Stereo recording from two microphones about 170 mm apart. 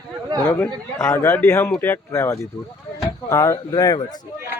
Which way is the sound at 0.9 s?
15° left (ahead or behind).